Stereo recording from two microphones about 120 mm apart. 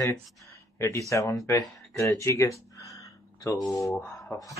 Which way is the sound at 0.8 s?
25° left (ahead or behind).